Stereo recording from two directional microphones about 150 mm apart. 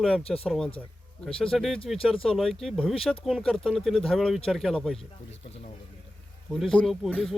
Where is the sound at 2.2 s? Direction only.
Centre (ahead or behind).